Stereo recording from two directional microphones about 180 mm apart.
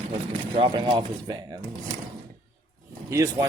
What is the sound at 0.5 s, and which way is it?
Speech, 25° right (ahead or behind).